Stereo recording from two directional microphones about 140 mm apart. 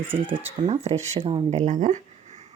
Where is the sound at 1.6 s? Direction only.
60° right (ahead or behind).